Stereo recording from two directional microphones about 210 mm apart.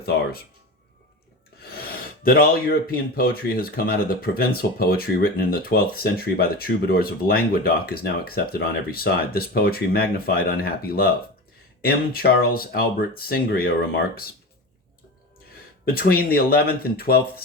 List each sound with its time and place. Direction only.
0.0 s speech: 45° left (ahead or behind)
2.2 s speech: 45° left (ahead or behind)
15.9 s speech: 45° left (ahead or behind)